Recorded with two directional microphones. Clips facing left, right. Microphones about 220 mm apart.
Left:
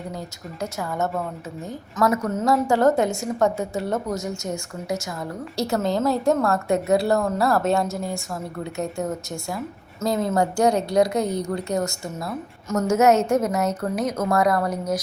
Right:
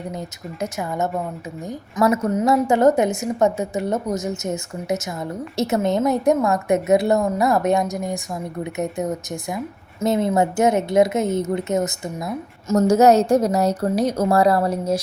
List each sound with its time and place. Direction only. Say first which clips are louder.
0.1 s a woman's voice: right 3 dB; 20° right (ahead or behind)
12.6 s a woman's voice: right 4 dB; 30° right (ahead or behind)